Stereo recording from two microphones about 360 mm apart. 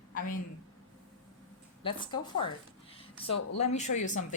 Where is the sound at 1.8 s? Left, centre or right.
Centre.